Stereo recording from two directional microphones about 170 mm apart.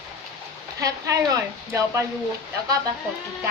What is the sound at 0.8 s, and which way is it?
A woman's voice, 20° right (ahead or behind).